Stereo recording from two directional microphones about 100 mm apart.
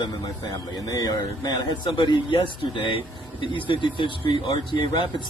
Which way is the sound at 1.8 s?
55° left (ahead or behind).